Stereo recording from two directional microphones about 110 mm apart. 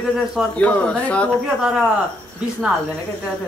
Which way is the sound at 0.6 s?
10° left (ahead or behind).